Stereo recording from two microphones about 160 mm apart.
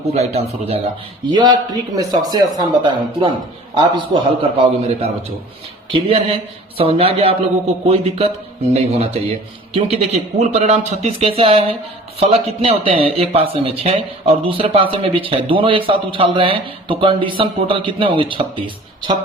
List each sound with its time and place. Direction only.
0.1 s a man's voice: 40° right (ahead or behind)
1.3 s a man's voice: 30° right (ahead or behind)